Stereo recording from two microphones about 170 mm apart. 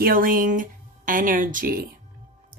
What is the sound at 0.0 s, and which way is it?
Speech, 55° right (ahead or behind).